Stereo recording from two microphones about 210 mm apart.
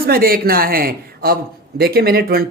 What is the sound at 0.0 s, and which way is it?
Speech, 45° right (ahead or behind).